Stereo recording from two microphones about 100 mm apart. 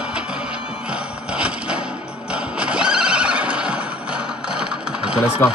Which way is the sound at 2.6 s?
10° right (ahead or behind).